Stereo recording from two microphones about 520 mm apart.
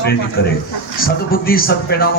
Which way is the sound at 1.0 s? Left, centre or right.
Centre.